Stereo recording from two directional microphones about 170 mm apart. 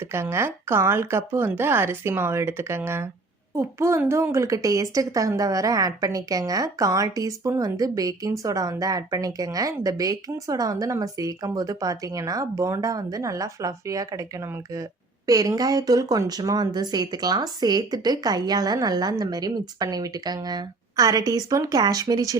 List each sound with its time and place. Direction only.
0.0 s a woman's voice: 15° right (ahead or behind)